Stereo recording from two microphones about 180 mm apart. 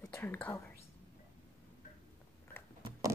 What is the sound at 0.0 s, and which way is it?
Speech, 15° left (ahead or behind).